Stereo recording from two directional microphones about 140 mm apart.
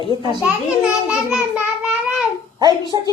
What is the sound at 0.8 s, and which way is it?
Child singing, 5° right (ahead or behind).